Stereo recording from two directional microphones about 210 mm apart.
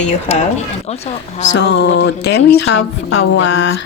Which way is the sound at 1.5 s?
55° left (ahead or behind).